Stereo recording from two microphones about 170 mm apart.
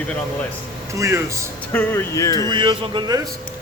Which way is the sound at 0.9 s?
20° right (ahead or behind).